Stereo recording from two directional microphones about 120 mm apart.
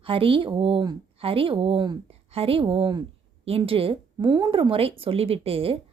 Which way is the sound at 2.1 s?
50° right (ahead or behind).